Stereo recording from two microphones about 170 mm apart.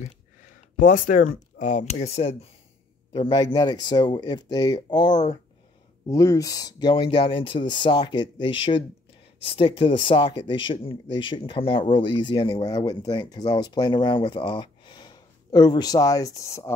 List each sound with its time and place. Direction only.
0.7 s speech: 50° left (ahead or behind); by 16.7 s 20° left (ahead or behind)